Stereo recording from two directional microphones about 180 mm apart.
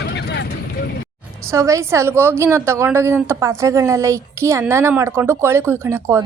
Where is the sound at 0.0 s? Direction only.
70° left (ahead or behind).